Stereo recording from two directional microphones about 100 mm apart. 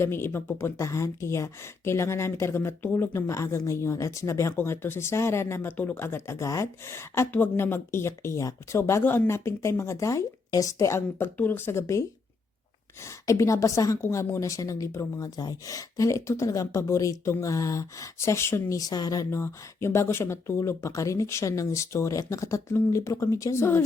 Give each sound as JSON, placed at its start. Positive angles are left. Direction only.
{"t": 0.0, "sound": "a woman's voice", "side_deg": 25}
{"t": 13.2, "sound": "a woman's voice", "side_deg": 30}
{"t": 18.8, "sound": "a woman's voice", "side_deg": 40}